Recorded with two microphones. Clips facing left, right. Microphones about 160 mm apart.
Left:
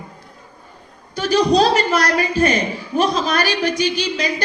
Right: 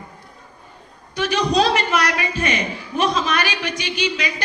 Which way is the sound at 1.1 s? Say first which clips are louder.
Left 4 dB; 35° left (ahead or behind).